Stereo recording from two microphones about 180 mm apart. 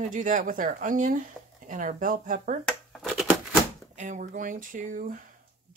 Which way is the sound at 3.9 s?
45° right (ahead or behind).